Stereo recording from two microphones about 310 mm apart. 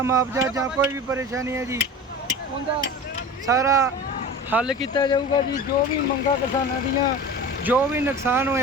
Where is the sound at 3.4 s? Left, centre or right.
Centre.